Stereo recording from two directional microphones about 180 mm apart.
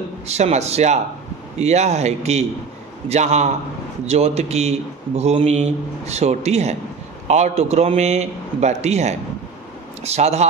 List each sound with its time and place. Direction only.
0.3 s a man's voice: 35° right (ahead or behind)